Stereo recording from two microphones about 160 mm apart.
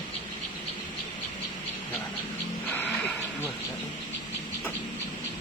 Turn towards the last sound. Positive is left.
turn(degrees=10)  # may be behind; listen again after turning